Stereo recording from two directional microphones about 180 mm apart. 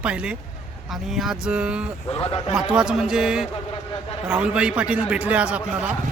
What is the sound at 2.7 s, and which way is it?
Speech, 5° right (ahead or behind).